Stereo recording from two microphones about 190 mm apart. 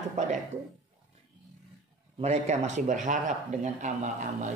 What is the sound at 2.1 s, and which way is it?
A man's voice, 35° right (ahead or behind).